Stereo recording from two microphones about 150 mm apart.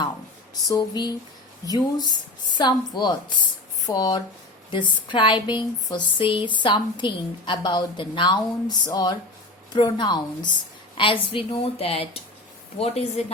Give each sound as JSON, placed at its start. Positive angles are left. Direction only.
{"t": 0.7, "sound": "a woman's voice", "side_deg": 30}